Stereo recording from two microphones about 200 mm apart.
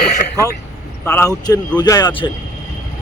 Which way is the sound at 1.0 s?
10° left (ahead or behind).